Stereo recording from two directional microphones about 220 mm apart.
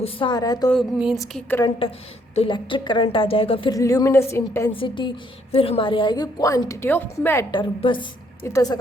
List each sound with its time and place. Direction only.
0.0 s speech: 20° left (ahead or behind)
0.7 s speech: centre (ahead or behind)
2.3 s a woman's voice: 25° left (ahead or behind)
4.7 s a woman's voice: 20° left (ahead or behind)
7.5 s a woman's voice: 20° left (ahead or behind)